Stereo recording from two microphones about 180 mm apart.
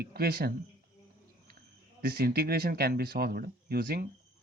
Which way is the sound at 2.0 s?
60° right (ahead or behind).